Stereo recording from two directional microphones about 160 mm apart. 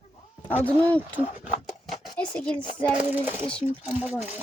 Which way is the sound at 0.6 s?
10° left (ahead or behind).